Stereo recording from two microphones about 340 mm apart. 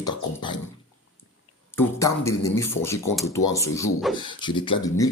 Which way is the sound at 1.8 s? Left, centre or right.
Centre.